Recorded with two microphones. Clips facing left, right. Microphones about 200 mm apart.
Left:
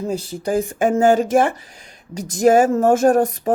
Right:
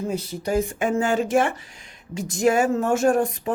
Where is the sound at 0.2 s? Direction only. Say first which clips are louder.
Left 3 dB; 30° left (ahead or behind).